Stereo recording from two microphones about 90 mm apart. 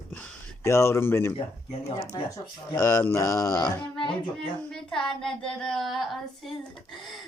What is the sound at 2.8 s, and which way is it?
Speech, 30° left (ahead or behind).